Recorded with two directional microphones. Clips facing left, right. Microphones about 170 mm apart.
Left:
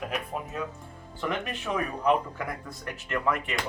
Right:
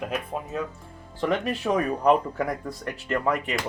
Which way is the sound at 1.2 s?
35° right (ahead or behind).